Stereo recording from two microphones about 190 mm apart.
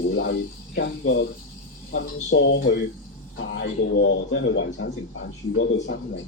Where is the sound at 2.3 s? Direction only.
75° left (ahead or behind).